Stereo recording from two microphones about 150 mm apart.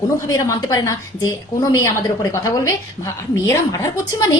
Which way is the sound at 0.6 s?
25° left (ahead or behind).